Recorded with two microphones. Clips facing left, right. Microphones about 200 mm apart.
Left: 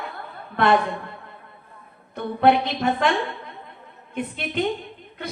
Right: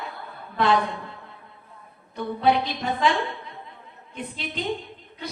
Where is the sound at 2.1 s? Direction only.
60° left (ahead or behind).